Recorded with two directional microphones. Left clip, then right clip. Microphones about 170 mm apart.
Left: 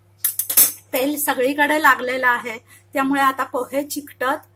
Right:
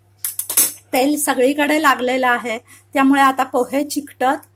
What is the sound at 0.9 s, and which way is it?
A woman's voice, 25° right (ahead or behind).